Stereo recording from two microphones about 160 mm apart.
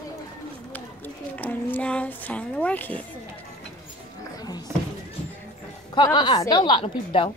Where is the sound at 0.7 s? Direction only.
10° left (ahead or behind).